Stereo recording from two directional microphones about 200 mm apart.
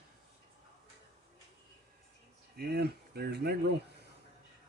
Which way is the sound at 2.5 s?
55° right (ahead or behind).